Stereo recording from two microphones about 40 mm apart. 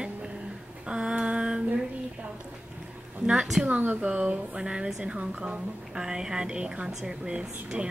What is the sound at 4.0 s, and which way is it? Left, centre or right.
A woman's voice, right.